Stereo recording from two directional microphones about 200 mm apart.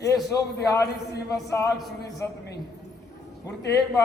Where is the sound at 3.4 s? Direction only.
15° left (ahead or behind).